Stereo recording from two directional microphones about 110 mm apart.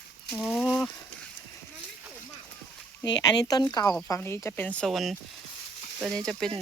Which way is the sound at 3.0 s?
35° left (ahead or behind).